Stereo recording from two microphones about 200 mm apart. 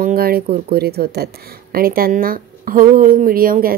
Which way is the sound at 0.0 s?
50° right (ahead or behind).